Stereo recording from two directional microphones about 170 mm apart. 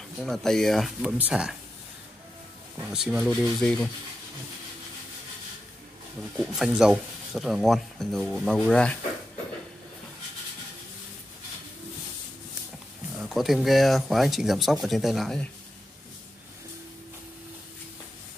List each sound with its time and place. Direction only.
0.2 s speech: centre (ahead or behind)
2.9 s speech: 5° right (ahead or behind)
6.3 s speech: centre (ahead or behind)
13.2 s speech: centre (ahead or behind)